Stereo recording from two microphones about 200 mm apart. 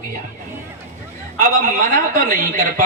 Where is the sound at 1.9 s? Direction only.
45° right (ahead or behind).